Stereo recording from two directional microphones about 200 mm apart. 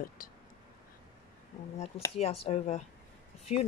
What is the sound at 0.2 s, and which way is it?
Speech, 45° left (ahead or behind).